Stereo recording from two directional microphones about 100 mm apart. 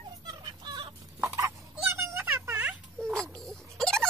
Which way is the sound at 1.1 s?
30° right (ahead or behind).